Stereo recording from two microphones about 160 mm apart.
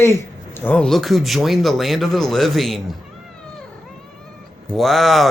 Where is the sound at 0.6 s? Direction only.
5° left (ahead or behind).